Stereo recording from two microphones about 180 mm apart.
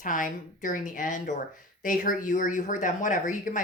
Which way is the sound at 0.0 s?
45° left (ahead or behind).